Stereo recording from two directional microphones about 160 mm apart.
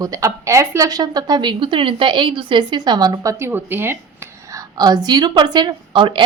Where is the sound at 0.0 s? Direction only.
20° right (ahead or behind).